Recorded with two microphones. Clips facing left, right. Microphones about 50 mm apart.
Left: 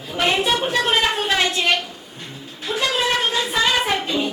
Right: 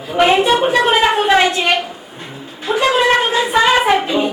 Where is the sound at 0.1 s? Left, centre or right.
Centre.